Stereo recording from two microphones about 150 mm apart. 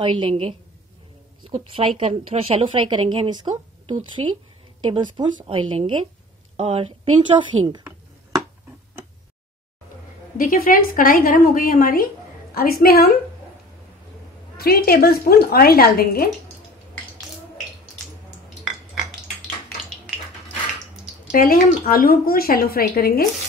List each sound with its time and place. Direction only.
0.0 s a woman's voice: 35° right (ahead or behind)
4.2 s a woman's voice: 40° right (ahead or behind)
10.3 s a woman's voice: 70° left (ahead or behind); by 13.2 s 90° left
14.6 s a woman's voice: 90° left
21.3 s a woman's voice: 60° left (ahead or behind); by 23.2 s 90° left